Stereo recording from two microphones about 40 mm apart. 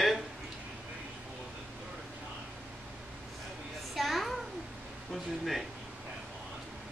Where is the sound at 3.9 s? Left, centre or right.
Centre.